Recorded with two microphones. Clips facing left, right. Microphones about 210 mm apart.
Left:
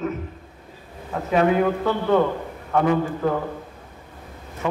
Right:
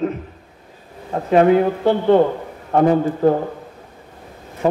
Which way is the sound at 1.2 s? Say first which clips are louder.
Right 5 dB; 30° right (ahead or behind).